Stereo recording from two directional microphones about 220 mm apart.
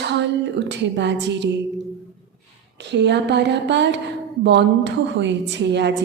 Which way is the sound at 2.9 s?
50° right (ahead or behind).